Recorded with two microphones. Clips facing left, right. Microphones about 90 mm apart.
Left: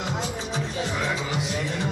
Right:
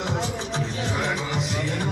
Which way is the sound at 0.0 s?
5° left (ahead or behind).